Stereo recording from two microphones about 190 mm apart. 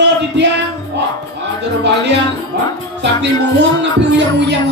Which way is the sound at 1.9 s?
65° right (ahead or behind).